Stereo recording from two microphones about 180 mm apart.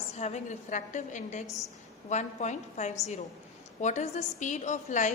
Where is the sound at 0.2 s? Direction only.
40° left (ahead or behind).